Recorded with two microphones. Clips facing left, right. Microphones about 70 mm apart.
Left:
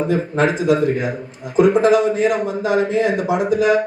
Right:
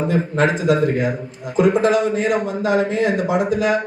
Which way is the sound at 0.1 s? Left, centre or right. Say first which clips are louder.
Right 1 dB; right.